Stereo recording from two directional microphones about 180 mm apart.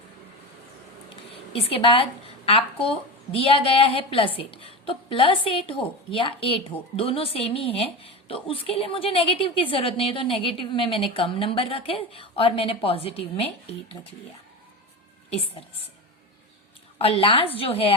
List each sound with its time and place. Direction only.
1.1 s a sound: 30° left (ahead or behind)
2.5 s a woman's voice: 30° left (ahead or behind)
17.0 s a woman's voice: 30° left (ahead or behind)